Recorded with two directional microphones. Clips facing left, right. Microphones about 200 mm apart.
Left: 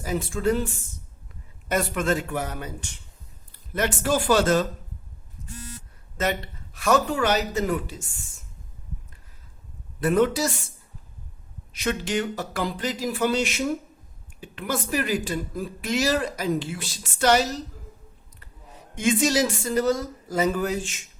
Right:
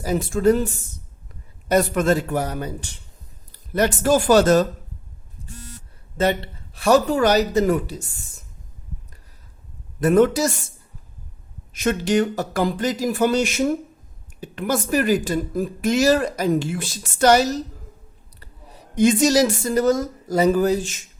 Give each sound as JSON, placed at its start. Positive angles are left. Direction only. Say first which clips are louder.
{"t": 0.0, "sound": "speech", "louder": "right 6 dB", "side_deg": -40}
{"t": 5.4, "sound": "buzzer", "louder": "even", "side_deg": -30}
{"t": 6.1, "sound": "speech", "louder": "right 6 dB", "side_deg": -30}
{"t": 10.0, "sound": "speech", "louder": "right 5 dB", "side_deg": -45}
{"t": 11.7, "sound": "speech", "louder": "right 6 dB", "side_deg": -45}